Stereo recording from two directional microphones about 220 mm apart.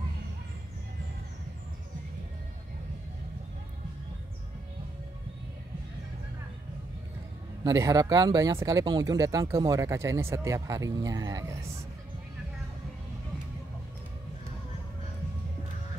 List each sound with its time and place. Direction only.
7.6 s speech: 15° right (ahead or behind)